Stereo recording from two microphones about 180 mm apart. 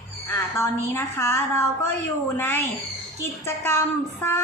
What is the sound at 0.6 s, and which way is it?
A woman's voice, 15° left (ahead or behind).